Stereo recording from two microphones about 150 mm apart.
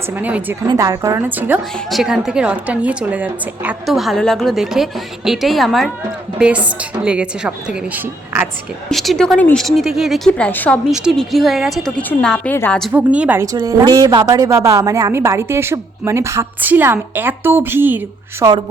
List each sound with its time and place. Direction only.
0.1 s a woman's voice: 10° right (ahead or behind)
0.7 s a woman's voice: 20° right (ahead or behind)
3.8 s a woman's voice: centre (ahead or behind)
8.9 s a woman's voice: centre (ahead or behind)
10.9 s a woman's voice: centre (ahead or behind)
12.9 s a woman's voice: 10° right (ahead or behind)
13.4 s a woman's voice: 20° right (ahead or behind)